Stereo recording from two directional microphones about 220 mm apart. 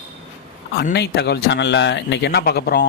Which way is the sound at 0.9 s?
50° left (ahead or behind).